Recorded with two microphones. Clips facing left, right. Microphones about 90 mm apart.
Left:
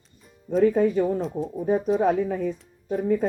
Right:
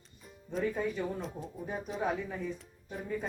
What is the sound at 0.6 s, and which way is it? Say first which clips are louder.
Speech: left 13 dB; 50° left (ahead or behind).